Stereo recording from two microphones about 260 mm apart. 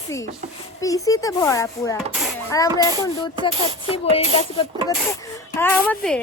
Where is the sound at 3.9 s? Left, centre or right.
Left.